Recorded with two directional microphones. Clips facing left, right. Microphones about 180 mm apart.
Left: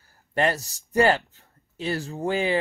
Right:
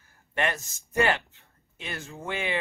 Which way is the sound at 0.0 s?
35° left (ahead or behind).